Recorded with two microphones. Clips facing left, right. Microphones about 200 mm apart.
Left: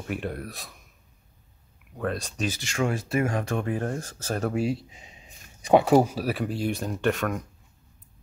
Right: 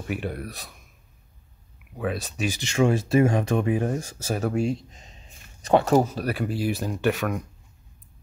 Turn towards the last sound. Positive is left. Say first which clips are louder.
# right 1 dB
turn(degrees=-5)  # may be behind; listen again after turning